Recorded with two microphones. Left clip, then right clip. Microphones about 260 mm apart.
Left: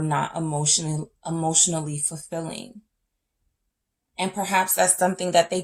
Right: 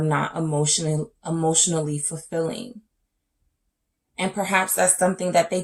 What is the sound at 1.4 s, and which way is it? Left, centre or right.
Speech, left.